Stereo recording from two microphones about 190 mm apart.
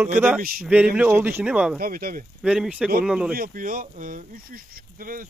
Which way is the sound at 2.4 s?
Centre (ahead or behind).